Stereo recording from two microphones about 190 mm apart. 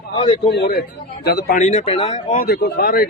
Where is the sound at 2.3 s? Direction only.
60° left (ahead or behind).